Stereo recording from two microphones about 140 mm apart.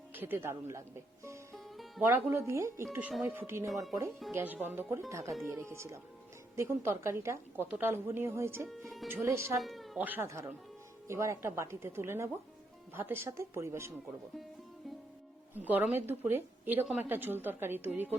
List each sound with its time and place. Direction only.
0.1 s speech: 15° right (ahead or behind)
1.5 s music: centre (ahead or behind)
2.0 s a woman's voice: 15° right (ahead or behind)
9.6 s cat: centre (ahead or behind)
10.0 s a woman's voice: 15° right (ahead or behind)
15.5 s a woman's voice: 10° right (ahead or behind)